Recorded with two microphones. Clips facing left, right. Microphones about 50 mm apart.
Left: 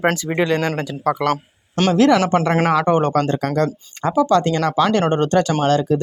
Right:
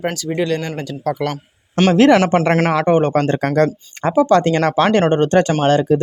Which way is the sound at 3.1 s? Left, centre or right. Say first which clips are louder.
Right 3 dB; right.